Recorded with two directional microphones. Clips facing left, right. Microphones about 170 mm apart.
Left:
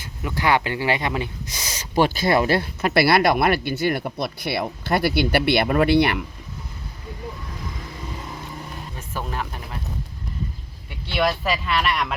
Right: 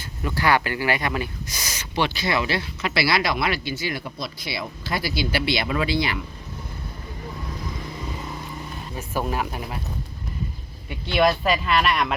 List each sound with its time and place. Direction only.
0.0 s speech: 15° left (ahead or behind); by 6.2 s 60° left (ahead or behind)
9.0 s speech: 10° right (ahead or behind)
10.8 s speech: centre (ahead or behind)